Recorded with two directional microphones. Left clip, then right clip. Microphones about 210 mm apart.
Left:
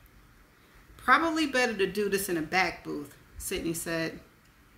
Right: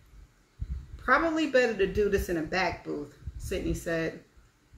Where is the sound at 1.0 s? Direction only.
35° left (ahead or behind).